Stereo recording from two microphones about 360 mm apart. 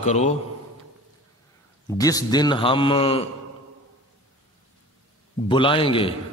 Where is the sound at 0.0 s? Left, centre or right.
Centre.